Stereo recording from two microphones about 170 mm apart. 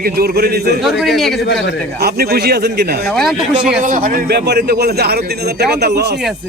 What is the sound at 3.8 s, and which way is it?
A man's voice, 50° right (ahead or behind).